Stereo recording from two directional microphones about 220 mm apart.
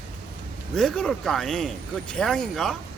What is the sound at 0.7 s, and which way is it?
Speech, centre (ahead or behind).